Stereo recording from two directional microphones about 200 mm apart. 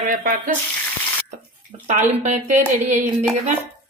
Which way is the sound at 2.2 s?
40° right (ahead or behind).